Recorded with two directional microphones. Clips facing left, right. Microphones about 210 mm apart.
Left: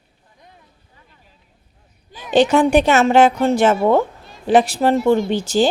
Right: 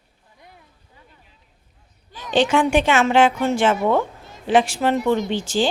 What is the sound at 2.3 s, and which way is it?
A woman's voice, 40° left (ahead or behind).